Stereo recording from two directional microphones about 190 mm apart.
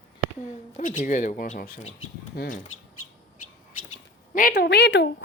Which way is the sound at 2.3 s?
55° left (ahead or behind).